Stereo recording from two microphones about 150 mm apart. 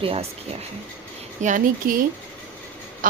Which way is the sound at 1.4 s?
60° right (ahead or behind).